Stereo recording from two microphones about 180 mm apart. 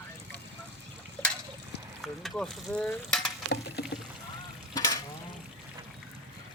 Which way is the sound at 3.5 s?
65° left (ahead or behind).